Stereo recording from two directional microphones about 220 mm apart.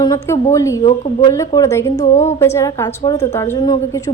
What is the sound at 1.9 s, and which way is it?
Speech, 35° left (ahead or behind).